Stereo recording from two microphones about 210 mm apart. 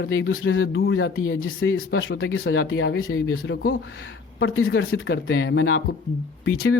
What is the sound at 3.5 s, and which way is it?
Speech, 55° left (ahead or behind).